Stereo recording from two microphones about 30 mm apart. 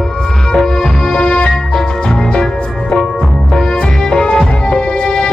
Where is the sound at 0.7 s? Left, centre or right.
Left.